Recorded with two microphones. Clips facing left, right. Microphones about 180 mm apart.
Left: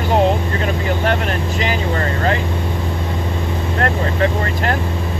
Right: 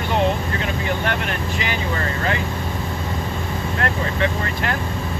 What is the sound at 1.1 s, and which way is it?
Speech, 35° left (ahead or behind).